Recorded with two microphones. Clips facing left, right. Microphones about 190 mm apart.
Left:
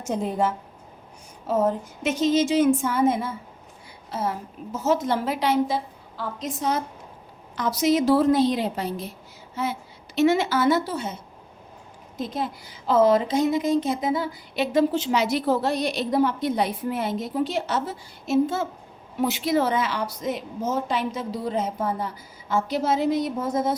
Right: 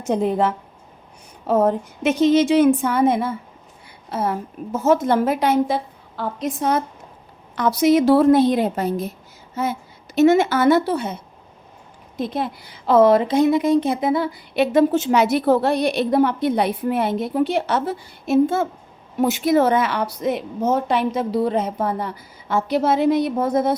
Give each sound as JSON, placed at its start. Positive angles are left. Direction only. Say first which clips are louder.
{"t": 0.0, "sound": "a woman's voice", "louder": "right 5 dB", "side_deg": -65}
{"t": 10.2, "sound": "a woman's voice", "louder": "right 5 dB", "side_deg": -50}